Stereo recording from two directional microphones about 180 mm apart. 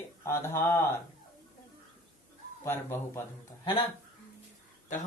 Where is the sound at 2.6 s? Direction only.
15° left (ahead or behind).